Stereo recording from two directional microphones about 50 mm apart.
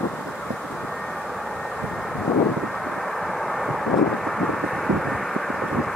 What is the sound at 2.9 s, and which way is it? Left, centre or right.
Vehicle, centre.